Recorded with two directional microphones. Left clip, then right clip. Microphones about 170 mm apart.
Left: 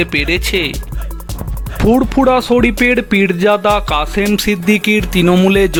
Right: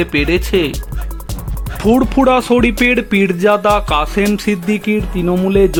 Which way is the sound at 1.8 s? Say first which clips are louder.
Even; 10° left (ahead or behind).